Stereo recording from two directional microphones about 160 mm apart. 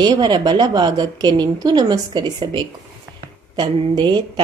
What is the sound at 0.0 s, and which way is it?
A woman's voice, 30° right (ahead or behind).